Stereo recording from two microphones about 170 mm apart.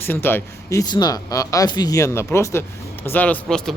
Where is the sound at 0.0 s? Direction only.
10° left (ahead or behind).